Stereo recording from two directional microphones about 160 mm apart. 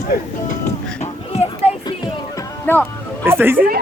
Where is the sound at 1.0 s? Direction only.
40° left (ahead or behind).